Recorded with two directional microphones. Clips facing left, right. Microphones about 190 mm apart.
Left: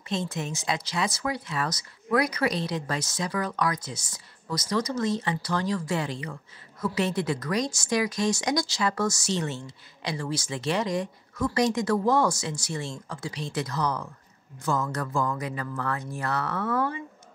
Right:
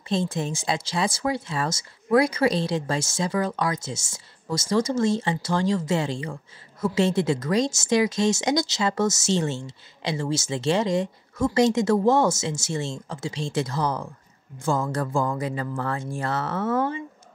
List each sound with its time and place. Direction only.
0.1 s a woman's voice: 30° right (ahead or behind)